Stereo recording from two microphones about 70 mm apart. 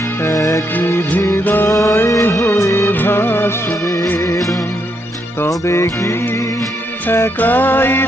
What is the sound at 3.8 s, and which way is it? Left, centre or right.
Music, left.